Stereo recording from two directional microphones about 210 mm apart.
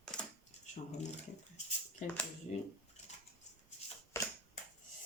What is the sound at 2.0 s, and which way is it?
Speech, 35° left (ahead or behind).